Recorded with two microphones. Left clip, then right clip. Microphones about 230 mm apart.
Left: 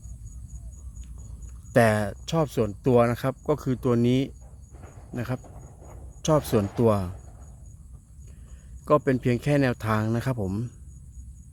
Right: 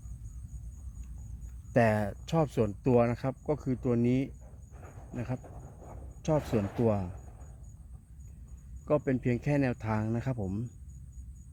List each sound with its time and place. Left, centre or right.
1.7 s speech: centre
8.8 s speech: centre